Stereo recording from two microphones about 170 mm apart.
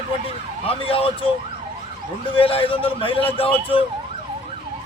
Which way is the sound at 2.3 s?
35° left (ahead or behind).